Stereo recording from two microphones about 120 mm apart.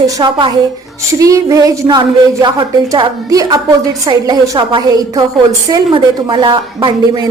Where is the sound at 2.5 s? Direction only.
40° right (ahead or behind).